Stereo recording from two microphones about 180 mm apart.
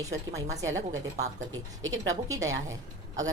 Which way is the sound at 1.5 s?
90° right.